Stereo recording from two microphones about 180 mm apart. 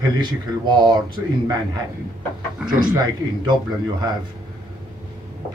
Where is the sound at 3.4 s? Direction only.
25° right (ahead or behind).